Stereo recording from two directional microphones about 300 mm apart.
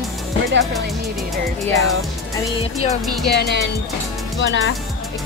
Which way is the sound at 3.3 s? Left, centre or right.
Left.